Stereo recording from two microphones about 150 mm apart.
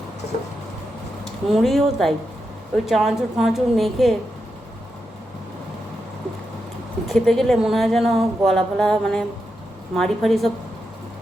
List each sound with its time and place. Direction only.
1.5 s a woman's voice: centre (ahead or behind)
7.1 s a woman's voice: centre (ahead or behind)